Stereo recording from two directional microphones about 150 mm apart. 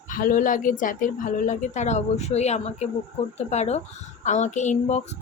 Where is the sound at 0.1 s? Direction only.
65° left (ahead or behind).